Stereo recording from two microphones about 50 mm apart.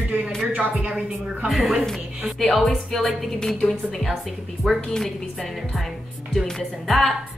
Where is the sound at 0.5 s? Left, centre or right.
Right.